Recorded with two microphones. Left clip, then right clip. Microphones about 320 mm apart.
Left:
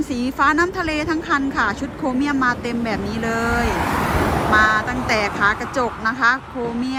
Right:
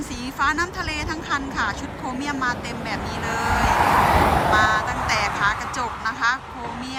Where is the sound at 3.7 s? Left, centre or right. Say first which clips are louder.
Right 4 dB; centre.